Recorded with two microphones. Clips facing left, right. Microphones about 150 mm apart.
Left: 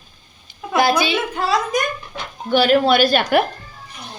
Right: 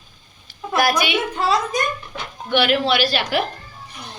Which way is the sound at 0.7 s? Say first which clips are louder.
Left 2 dB; 25° left (ahead or behind).